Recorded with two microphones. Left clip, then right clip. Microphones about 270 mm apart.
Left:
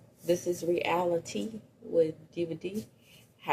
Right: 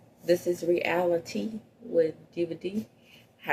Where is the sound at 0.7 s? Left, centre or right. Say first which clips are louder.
Right 3 dB; left.